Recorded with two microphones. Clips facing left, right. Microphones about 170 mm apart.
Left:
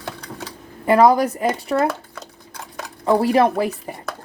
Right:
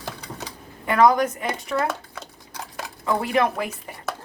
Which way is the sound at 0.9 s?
35° left (ahead or behind).